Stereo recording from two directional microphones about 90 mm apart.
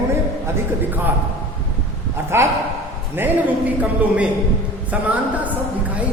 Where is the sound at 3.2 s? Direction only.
25° right (ahead or behind).